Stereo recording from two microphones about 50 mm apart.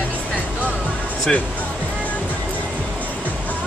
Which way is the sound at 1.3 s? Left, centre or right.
Centre.